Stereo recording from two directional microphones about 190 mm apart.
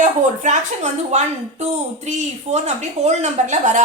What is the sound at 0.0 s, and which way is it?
Speech, 40° right (ahead or behind).